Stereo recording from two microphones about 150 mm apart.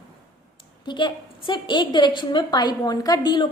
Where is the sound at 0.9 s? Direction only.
30° left (ahead or behind).